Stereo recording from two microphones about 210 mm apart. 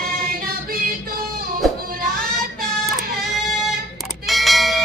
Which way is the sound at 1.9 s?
45° right (ahead or behind).